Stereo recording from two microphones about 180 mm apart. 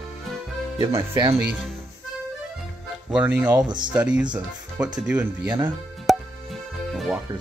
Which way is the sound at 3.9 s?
5° right (ahead or behind).